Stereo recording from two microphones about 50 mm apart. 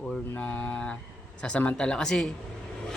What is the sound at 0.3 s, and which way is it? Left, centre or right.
Mantra, left.